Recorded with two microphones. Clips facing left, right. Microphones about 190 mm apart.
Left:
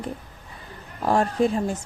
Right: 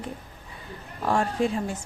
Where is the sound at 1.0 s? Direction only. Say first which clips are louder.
Left 3 dB; 40° left (ahead or behind).